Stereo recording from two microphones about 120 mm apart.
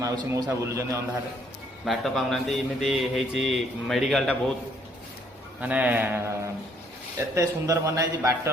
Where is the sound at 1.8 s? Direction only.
Centre (ahead or behind).